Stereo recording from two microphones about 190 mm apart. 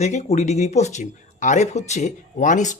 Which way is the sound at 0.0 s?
35° left (ahead or behind).